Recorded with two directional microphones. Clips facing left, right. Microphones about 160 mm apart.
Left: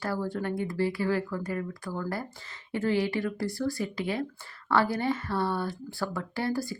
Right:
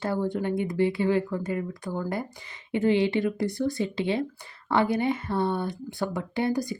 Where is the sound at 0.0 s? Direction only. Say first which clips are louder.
Right 4 dB; 20° right (ahead or behind).